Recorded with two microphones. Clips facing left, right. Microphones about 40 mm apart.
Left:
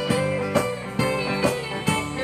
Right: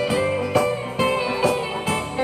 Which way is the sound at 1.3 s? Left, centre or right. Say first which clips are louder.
Right 3 dB; centre.